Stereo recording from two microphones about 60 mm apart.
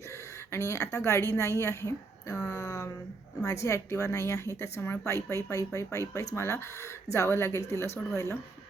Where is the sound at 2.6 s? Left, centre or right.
Left.